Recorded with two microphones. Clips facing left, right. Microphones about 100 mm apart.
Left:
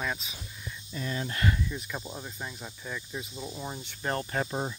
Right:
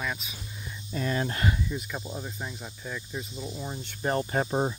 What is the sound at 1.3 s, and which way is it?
Speech, 25° right (ahead or behind).